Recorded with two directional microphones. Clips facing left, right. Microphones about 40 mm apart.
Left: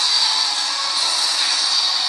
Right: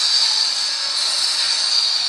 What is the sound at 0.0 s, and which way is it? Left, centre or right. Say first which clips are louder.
Music: left 1 dB; left.